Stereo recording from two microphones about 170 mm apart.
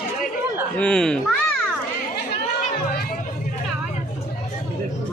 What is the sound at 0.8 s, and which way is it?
Speech, 5° left (ahead or behind).